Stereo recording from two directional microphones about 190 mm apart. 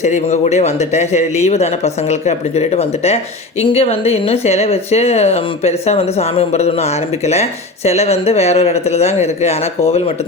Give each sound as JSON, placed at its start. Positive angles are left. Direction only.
{"t": 0.0, "sound": "a man's voice", "side_deg": 40}
{"t": 7.9, "sound": "a man's voice", "side_deg": 35}